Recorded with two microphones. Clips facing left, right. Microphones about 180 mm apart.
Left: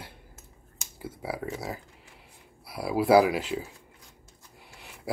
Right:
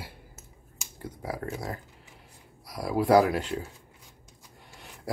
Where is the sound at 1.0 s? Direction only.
5° left (ahead or behind).